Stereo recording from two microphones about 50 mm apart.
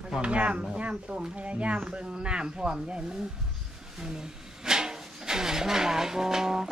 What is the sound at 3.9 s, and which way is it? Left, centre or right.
Speech, centre.